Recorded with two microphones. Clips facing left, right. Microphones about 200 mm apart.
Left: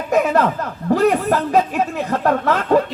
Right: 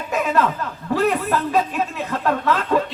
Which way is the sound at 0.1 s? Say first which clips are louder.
Left 4 dB; 40° left (ahead or behind).